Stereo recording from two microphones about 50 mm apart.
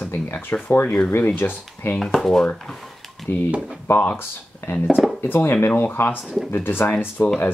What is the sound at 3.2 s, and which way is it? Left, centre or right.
Speech, left.